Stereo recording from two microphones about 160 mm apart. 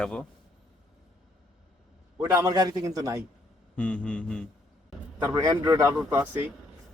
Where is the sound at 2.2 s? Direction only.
10° right (ahead or behind).